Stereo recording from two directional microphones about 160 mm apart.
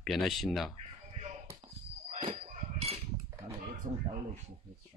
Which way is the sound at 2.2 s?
45° right (ahead or behind).